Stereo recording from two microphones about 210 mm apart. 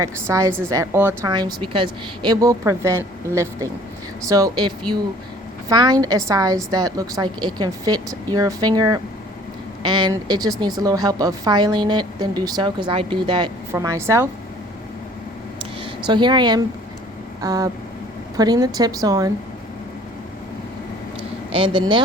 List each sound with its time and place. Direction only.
0.0 s a woman's voice: 15° right (ahead or behind)
16.0 s a woman's voice: 20° right (ahead or behind)
21.5 s a woman's voice: 25° right (ahead or behind)